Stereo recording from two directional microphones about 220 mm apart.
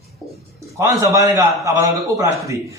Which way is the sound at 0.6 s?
15° right (ahead or behind).